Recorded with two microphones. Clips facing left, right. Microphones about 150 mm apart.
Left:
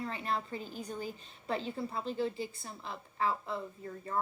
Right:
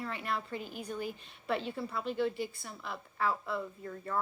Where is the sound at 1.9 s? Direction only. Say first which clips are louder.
Right 3 dB; 30° left (ahead or behind).